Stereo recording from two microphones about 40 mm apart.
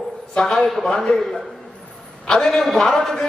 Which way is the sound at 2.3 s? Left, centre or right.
Centre.